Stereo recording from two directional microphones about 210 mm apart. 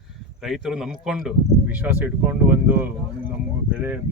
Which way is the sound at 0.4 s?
Centre (ahead or behind).